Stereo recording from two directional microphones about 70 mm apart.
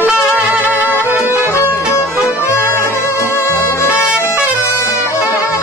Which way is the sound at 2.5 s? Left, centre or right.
Left.